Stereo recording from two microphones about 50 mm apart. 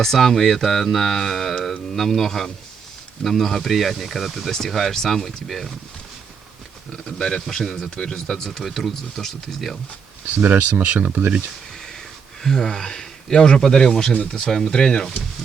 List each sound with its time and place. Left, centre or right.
0.0 s speech: centre
6.9 s a man's voice: centre
10.3 s speech: right
12.4 s a man's voice: centre